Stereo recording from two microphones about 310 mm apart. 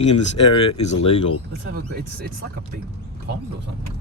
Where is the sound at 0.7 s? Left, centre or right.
Centre.